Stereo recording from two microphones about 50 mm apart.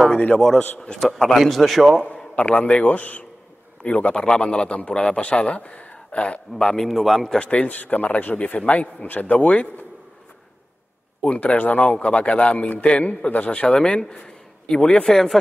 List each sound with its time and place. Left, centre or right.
0.9 s a man's voice: centre
2.3 s a man's voice: left
6.9 s a man's voice: centre
7.3 s a man's voice: left
11.2 s a man's voice: left; by 15.3 s centre